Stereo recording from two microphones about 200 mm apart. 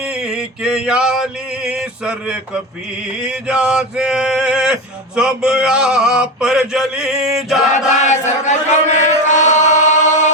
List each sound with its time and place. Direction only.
0.1 s male singing: 5° right (ahead or behind)
8.0 s chant: 35° left (ahead or behind)